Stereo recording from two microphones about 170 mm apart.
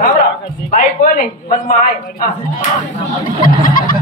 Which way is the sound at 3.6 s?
55° left (ahead or behind).